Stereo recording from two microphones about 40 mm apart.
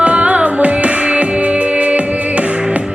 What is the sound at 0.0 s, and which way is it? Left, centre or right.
Music, right.